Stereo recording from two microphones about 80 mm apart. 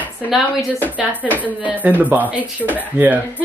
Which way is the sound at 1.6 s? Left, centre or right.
Right.